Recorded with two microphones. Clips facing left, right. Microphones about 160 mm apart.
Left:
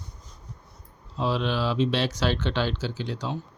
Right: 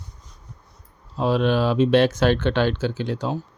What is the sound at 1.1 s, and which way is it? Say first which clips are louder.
Speech: right 6 dB; 50° right (ahead or behind).